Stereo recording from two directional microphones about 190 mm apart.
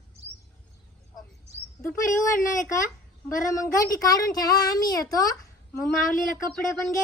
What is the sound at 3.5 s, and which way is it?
Speech, 15° left (ahead or behind).